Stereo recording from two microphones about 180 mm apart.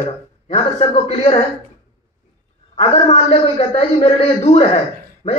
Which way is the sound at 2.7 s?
35° left (ahead or behind).